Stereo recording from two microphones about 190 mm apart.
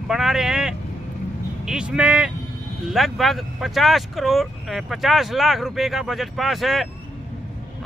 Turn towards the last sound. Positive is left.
turn(degrees=0)  # may be behind; listen again after turning